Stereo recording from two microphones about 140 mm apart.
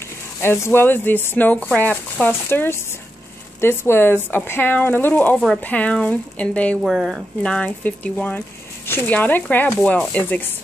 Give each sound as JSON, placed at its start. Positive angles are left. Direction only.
{"t": 0.4, "sound": "speech", "side_deg": 15}
{"t": 6.8, "sound": "speech", "side_deg": 0}